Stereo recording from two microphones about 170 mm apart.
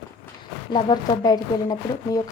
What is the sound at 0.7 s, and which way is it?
Speech, 25° left (ahead or behind).